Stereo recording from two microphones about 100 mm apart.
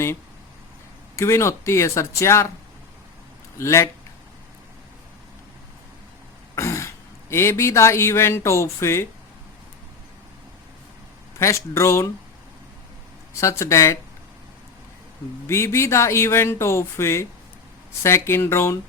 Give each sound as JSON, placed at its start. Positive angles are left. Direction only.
{"t": 1.1, "sound": "speech", "side_deg": 30}
{"t": 3.6, "sound": "speech", "side_deg": 30}
{"t": 6.6, "sound": "speech", "side_deg": 30}
{"t": 11.3, "sound": "speech", "side_deg": 25}
{"t": 13.4, "sound": "speech", "side_deg": 30}
{"t": 15.4, "sound": "speech", "side_deg": 25}